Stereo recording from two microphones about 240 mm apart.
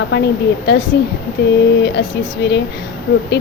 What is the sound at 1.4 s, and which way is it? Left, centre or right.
Speech, left.